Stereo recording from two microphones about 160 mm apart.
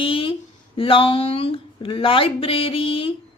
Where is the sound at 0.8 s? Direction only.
35° left (ahead or behind).